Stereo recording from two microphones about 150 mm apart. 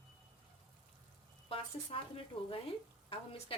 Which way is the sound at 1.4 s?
40° left (ahead or behind).